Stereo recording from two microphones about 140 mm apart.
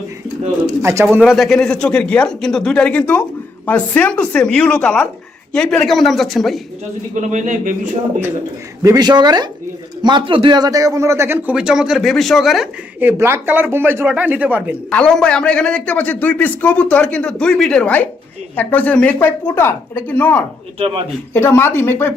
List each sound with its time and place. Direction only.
0.8 s speech: 20° right (ahead or behind)
1.2 s a man's voice: centre (ahead or behind)
7.1 s speech: 60° right (ahead or behind)
8.8 s a man's voice: 25° right (ahead or behind); by 12.6 s centre (ahead or behind)
13.0 s a man's voice: 15° right (ahead or behind)
14.8 s a man's voice: 5° left (ahead or behind)
20.7 s a man's voice: 45° right (ahead or behind)
21.3 s a man's voice: 15° left (ahead or behind)